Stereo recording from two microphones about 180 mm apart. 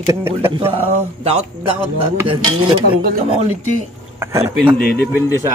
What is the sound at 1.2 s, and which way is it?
Speech, 30° right (ahead or behind).